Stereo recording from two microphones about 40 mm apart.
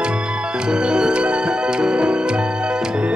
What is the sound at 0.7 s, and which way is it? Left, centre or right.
Music, right.